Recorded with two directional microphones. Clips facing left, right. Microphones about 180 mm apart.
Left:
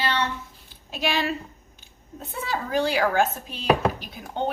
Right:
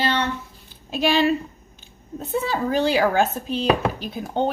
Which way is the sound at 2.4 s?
30° right (ahead or behind).